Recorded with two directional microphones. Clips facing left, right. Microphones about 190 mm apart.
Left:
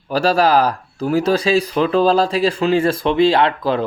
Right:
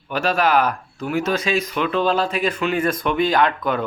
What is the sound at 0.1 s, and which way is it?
Speech, 35° left (ahead or behind).